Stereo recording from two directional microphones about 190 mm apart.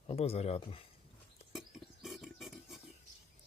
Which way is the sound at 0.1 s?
30° left (ahead or behind).